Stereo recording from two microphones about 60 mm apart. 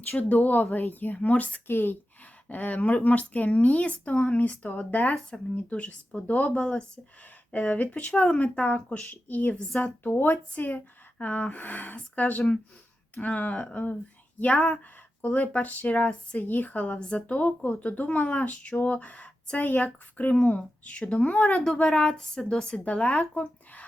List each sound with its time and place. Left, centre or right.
0.2 s speech: left
1.6 s speech: left; by 7.0 s centre
7.5 s speech: left